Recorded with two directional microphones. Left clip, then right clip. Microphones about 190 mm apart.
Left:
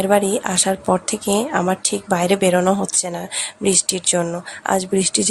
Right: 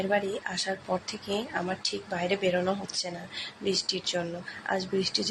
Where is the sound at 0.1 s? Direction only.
40° left (ahead or behind).